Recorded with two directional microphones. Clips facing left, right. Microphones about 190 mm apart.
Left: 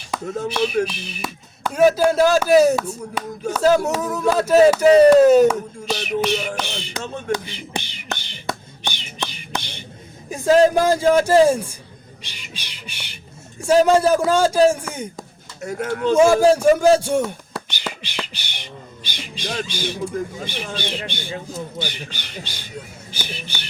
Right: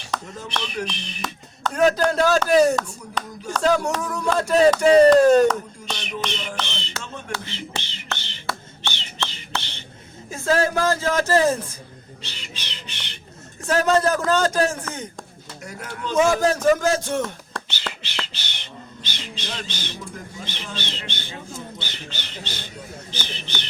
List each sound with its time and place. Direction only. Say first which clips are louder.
0.4 s speech: left 12 dB; 5° left (ahead or behind)
7.3 s finger snapping: left 3 dB; 15° left (ahead or behind)
10.2 s speech: left 7 dB; 15° left (ahead or behind)
12.2 s bird: right 1 dB; 15° left (ahead or behind)
13.6 s speech: left 5 dB; 10° left (ahead or behind)
15.6 s speech: left 11 dB; 50° left (ahead or behind)
16.1 s speech: left 5 dB; 10° left (ahead or behind)